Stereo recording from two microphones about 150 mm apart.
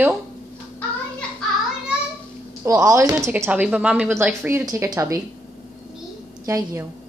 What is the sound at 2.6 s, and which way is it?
Speech, 20° right (ahead or behind).